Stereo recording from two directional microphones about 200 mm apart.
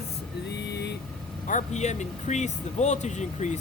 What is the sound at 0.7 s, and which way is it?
Vehicle, 55° left (ahead or behind).